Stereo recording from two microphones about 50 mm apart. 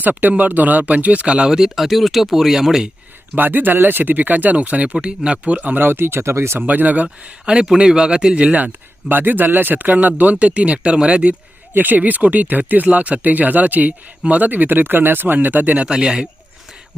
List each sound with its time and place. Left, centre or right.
0.0 s speech: right
1.5 s a man's voice: centre
1.7 s speech: centre
3.3 s speech: right
5.8 s speech: right
6.6 s speech: right
7.4 s a man's voice: centre
8.5 s speech: right
10.3 s speech: right
11.7 s speech: right
15.9 s a man's voice: centre